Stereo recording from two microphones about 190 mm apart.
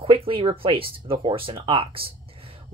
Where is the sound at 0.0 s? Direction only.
30° right (ahead or behind).